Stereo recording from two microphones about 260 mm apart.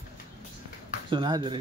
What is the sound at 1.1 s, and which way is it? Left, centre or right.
Speech, centre.